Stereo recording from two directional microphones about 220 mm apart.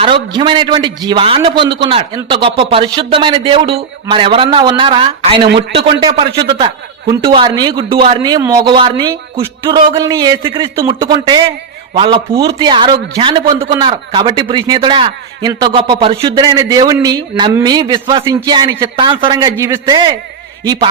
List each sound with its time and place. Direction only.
0.0 s a man's voice: 25° right (ahead or behind)